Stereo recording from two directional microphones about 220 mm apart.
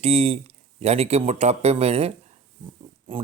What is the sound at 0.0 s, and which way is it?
Speech, 25° right (ahead or behind).